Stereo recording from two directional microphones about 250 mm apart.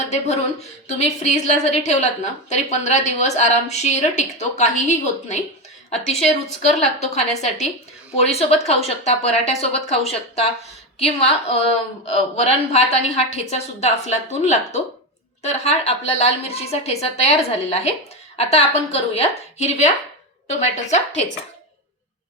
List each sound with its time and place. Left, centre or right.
0.9 s a woman's voice: left